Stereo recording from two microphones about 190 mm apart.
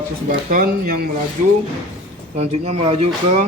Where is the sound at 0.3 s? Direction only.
50° right (ahead or behind).